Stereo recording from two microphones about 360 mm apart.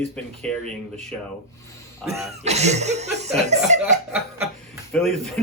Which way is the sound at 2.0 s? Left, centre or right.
Centre.